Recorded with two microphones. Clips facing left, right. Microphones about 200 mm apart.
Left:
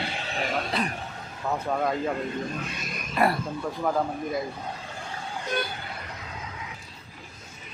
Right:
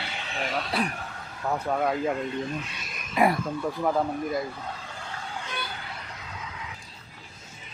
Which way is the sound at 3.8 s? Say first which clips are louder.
Even; 5° right (ahead or behind).